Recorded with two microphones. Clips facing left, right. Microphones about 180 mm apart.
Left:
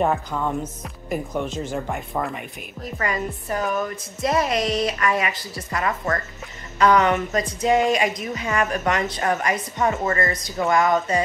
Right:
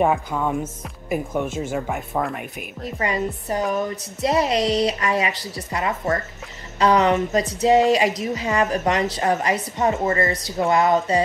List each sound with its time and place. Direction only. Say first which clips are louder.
0.0 s speech: right 2 dB; 10° right (ahead or behind)
2.8 s a woman's voice: right 2 dB; 25° right (ahead or behind)